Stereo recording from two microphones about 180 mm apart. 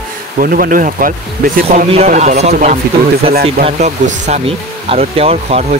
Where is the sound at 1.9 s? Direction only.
35° right (ahead or behind).